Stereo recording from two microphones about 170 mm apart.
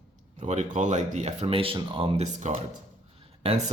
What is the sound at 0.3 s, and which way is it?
Speech, 40° right (ahead or behind).